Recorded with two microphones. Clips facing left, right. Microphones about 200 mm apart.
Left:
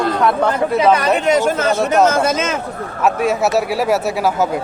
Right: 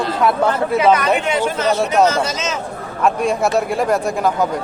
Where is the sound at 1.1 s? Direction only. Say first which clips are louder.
Left 4 dB; 40° left (ahead or behind).